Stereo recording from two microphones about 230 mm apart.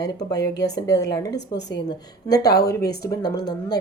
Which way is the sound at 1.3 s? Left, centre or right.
Left.